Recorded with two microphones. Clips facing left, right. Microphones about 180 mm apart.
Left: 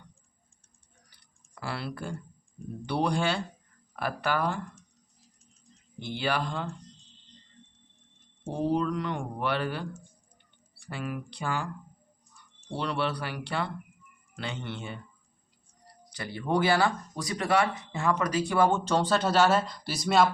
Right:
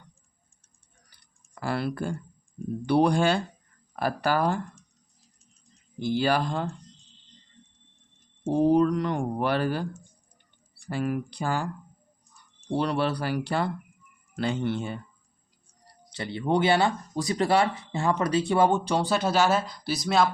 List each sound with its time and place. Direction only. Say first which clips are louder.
1.5 s speech: right 7 dB; 45° right (ahead or behind)
6.0 s speech: right 6 dB; 40° right (ahead or behind)
8.6 s speech: right 6 dB; 45° right (ahead or behind)
12.7 s speech: right 5 dB; 40° right (ahead or behind)
16.1 s speech: right 3 dB; 25° right (ahead or behind)
18.9 s speech: right 1 dB; 10° right (ahead or behind)